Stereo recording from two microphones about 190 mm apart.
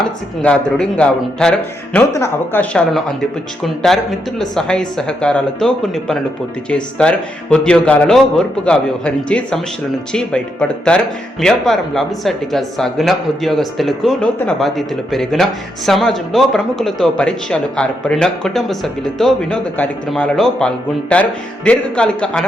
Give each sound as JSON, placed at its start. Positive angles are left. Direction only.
{"t": 0.0, "sound": "speech", "side_deg": 5}